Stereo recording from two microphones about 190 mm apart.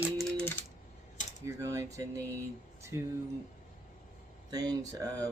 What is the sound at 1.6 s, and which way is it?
Speech, 15° right (ahead or behind).